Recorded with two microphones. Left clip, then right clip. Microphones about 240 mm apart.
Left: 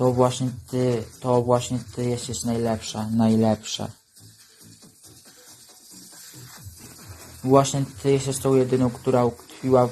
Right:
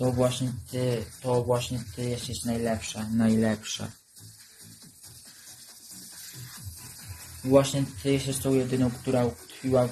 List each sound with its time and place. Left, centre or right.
0.0 s a man's voice: left
7.5 s a man's voice: centre